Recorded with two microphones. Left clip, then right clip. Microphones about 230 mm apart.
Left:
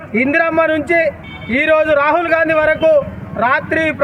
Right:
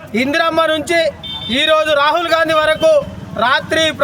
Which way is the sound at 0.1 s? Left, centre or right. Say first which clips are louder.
Left 1 dB; centre.